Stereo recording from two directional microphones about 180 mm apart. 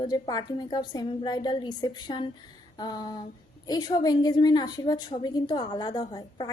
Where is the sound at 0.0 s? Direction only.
20° left (ahead or behind).